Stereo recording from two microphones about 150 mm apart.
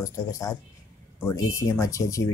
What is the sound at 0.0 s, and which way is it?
Speech, 20° left (ahead or behind).